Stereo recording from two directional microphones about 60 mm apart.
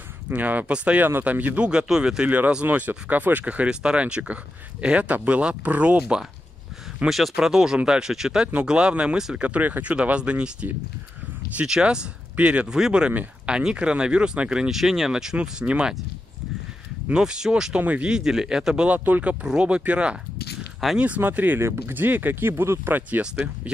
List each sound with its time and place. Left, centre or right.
0.3 s speech: right
1.7 s speech: centre
2.2 s speech: right
7.3 s speech: centre
17.1 s speech: centre
17.7 s speech: right
18.0 s speech: centre
18.9 s speech: right
19.4 s speech: centre
20.8 s speech: centre
21.2 s speech: right
21.5 s speech: right
21.9 s speech: right